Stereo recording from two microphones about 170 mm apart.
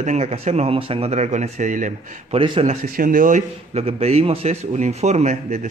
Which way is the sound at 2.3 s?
30° right (ahead or behind).